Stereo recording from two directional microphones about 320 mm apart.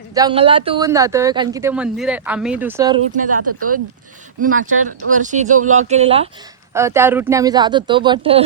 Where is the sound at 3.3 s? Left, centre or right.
Right.